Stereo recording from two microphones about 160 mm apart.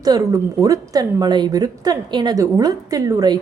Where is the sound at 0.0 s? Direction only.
25° right (ahead or behind).